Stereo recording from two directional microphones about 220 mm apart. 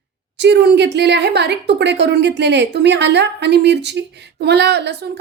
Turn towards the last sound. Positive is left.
turn(degrees=-50)  # may be behind; listen again after turning